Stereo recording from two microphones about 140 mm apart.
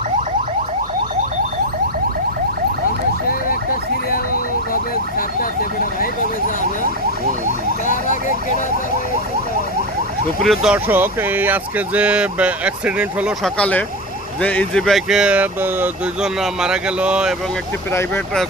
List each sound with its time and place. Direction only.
4.7 s a sound: 90° left
7.9 s speech: 70° left (ahead or behind)
10.4 s speech: centre (ahead or behind)
10.8 s speech: 15° right (ahead or behind)
13.4 s speech: 10° left (ahead or behind); by 17.3 s 5° right (ahead or behind)